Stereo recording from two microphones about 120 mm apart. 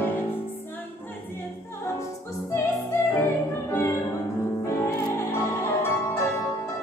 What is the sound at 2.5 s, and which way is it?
Music, 20° left (ahead or behind).